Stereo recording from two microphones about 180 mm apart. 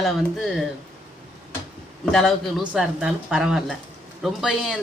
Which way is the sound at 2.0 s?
Centre (ahead or behind).